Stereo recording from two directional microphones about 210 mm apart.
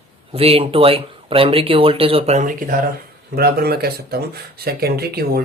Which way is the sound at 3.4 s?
50° right (ahead or behind).